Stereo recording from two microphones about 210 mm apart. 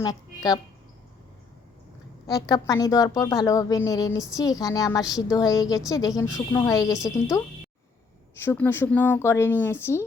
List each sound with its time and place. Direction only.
0.0 s a woman's voice: 20° left (ahead or behind)
2.2 s a woman's voice: 15° left (ahead or behind)